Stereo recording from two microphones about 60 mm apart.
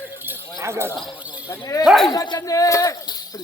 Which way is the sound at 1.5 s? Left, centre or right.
Left.